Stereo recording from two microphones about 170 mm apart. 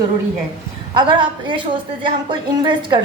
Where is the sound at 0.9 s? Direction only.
25° right (ahead or behind).